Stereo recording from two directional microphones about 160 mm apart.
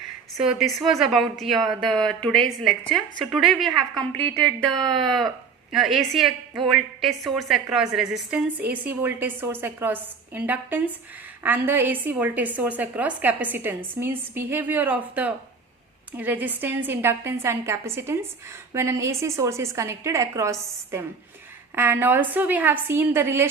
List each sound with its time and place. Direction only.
0.3 s a woman's voice: centre (ahead or behind)